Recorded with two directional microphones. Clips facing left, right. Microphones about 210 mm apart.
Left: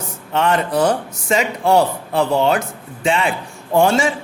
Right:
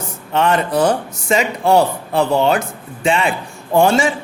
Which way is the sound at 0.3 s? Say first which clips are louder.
Right 1 dB; 15° right (ahead or behind).